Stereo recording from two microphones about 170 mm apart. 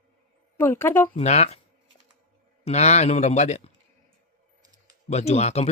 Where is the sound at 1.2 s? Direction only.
40° left (ahead or behind).